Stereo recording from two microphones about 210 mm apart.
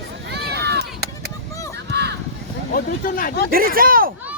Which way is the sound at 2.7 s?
45° left (ahead or behind).